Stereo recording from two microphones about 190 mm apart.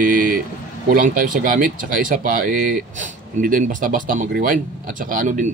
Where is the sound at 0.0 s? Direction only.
45° right (ahead or behind).